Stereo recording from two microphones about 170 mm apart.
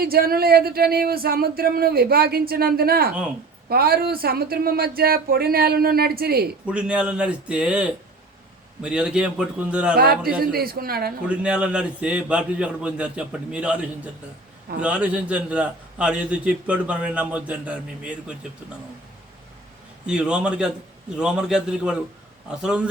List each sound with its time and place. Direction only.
0.0 s speech: 60° right (ahead or behind)
6.7 s a man's voice: 5° right (ahead or behind)
10.0 s speech: 60° right (ahead or behind)
11.3 s a man's voice: 5° right (ahead or behind)
20.1 s a man's voice: 5° right (ahead or behind)